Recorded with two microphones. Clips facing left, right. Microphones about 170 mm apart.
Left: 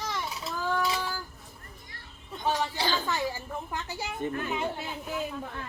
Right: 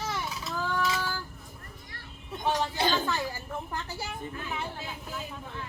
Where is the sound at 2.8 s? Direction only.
20° right (ahead or behind).